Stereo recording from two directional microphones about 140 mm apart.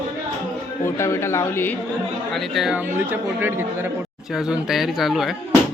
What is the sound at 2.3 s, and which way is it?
Speech, centre (ahead or behind).